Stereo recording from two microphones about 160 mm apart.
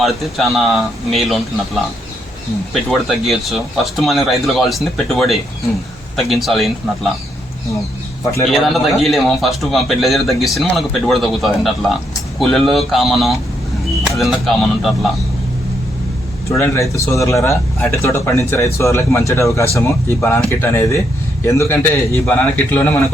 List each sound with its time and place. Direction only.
0.0 s a man's voice: centre (ahead or behind)
2.9 s a man's voice: centre (ahead or behind)
8.4 s a man's voice: centre (ahead or behind)
16.5 s speech: 20° left (ahead or behind)